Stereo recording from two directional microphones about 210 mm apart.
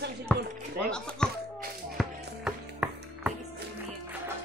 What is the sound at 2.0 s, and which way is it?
Music, 5° right (ahead or behind).